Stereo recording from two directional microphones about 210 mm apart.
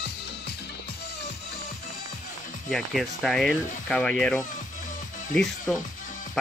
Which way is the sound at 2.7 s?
Centre (ahead or behind).